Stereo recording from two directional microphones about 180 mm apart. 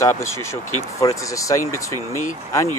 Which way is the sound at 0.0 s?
15° left (ahead or behind).